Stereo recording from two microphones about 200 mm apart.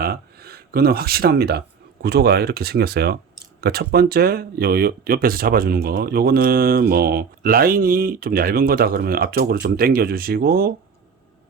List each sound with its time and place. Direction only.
0.0 s speech: 50° right (ahead or behind)